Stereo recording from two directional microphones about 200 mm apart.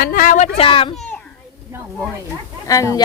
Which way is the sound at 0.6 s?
30° left (ahead or behind).